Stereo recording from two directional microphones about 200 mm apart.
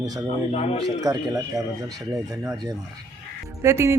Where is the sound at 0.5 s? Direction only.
30° left (ahead or behind).